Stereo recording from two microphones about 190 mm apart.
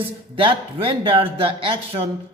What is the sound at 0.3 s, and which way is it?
A man's voice, 30° right (ahead or behind).